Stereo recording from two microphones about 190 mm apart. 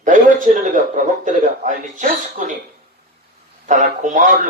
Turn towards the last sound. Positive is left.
turn(degrees=-40)  # may be behind; listen again after turning